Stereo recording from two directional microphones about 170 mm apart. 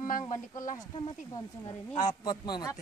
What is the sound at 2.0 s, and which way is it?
Speech, 25° left (ahead or behind).